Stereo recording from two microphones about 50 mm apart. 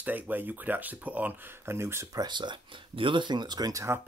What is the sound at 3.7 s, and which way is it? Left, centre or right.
Speech, right.